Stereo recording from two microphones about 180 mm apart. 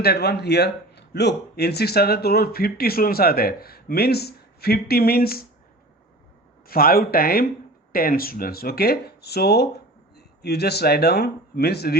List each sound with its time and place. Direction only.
0.0 s speech: 65° left (ahead or behind)
6.7 s speech: 55° left (ahead or behind)